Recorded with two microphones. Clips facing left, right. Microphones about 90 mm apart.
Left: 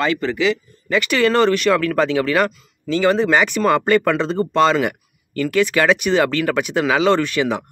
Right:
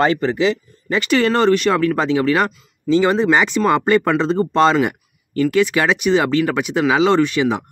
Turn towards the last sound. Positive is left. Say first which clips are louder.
# right 1 dB
turn(degrees=-20)  # may be behind; listen again after turning